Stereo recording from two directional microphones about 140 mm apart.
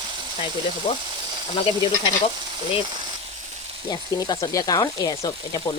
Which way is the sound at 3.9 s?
30° left (ahead or behind).